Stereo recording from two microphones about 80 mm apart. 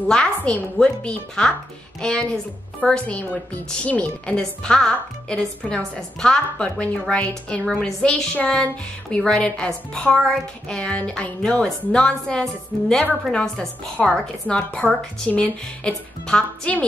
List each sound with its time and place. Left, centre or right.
0.1 s a woman's voice: centre